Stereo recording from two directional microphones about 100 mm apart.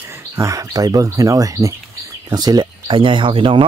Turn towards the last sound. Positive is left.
turn(degrees=-60)  # may be behind; listen again after turning